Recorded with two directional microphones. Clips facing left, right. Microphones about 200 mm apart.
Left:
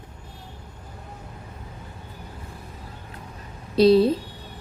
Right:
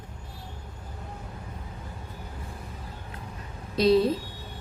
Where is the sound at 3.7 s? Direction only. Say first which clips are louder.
Left 5 dB; 35° left (ahead or behind).